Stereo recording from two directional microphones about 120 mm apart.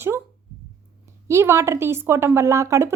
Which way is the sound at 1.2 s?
25° right (ahead or behind).